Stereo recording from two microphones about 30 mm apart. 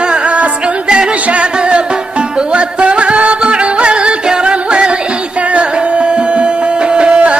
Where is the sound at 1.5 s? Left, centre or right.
Right.